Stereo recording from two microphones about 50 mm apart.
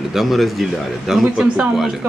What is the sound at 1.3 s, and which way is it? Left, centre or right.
Speech, centre.